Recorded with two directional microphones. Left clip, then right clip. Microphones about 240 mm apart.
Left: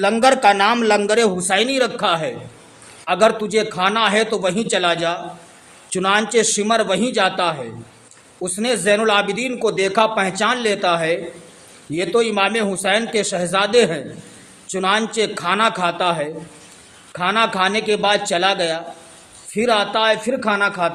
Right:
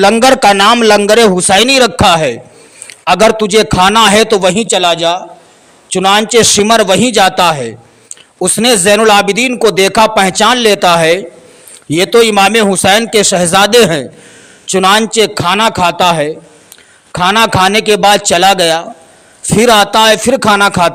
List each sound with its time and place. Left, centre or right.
0.0 s a man's voice: right